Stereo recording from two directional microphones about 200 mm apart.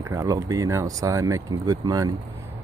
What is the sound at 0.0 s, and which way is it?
Speech, 15° right (ahead or behind).